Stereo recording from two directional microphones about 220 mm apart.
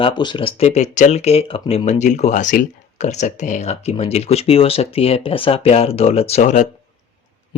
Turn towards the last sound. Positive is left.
turn(degrees=35)  # may be behind; listen again after turning